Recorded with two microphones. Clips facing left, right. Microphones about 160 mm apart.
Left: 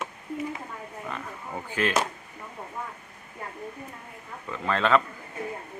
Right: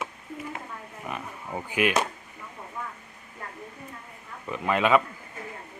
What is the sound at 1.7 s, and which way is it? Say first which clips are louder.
Speech: right 2 dB; 15° right (ahead or behind).